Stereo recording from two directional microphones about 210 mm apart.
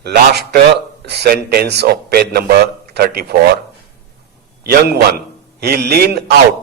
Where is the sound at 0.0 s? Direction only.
50° right (ahead or behind).